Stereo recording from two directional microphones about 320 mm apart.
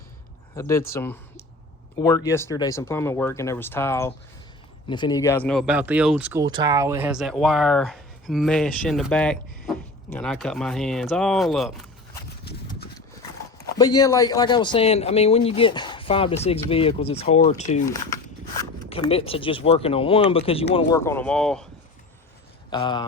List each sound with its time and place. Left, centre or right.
0.5 s speech: centre
13.7 s speech: centre
22.7 s speech: centre